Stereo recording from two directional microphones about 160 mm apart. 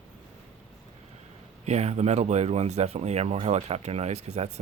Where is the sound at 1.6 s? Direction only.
45° right (ahead or behind).